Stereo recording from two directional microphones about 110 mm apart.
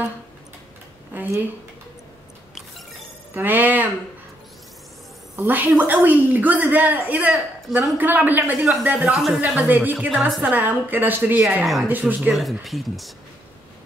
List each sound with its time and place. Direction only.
1.1 s speech: 20° right (ahead or behind)
3.3 s a woman's voice: 15° right (ahead or behind)
5.3 s a woman's voice: 20° right (ahead or behind)
9.0 s a woman's voice: 5° right (ahead or behind)
9.6 s a woman's voice: 15° right (ahead or behind)
9.9 s a woman's voice: 5° right (ahead or behind)
10.5 s a woman's voice: 15° right (ahead or behind)
11.6 s a woman's voice: centre (ahead or behind)
11.9 s a woman's voice: 10° right (ahead or behind)
12.6 s a woman's voice: centre (ahead or behind)